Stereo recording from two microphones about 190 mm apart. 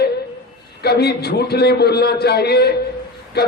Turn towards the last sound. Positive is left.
turn(degrees=55)  # may be behind; listen again after turning